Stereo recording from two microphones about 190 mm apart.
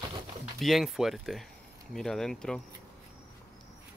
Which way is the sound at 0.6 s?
Centre (ahead or behind).